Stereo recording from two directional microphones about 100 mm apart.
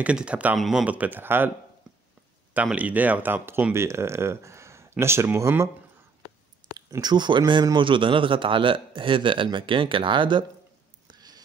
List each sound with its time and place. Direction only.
0.0 s speech: 10° right (ahead or behind)
0.6 s speech: centre (ahead or behind)
0.8 s speech: 15° right (ahead or behind)
2.5 s speech: 15° right (ahead or behind)
6.9 s a man's voice: 45° right (ahead or behind)
11.1 s a sound: 40° right (ahead or behind)